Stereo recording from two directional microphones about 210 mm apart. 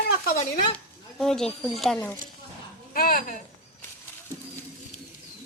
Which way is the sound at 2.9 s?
45° left (ahead or behind).